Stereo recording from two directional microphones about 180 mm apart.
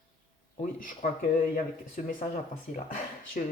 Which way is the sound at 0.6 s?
45° left (ahead or behind).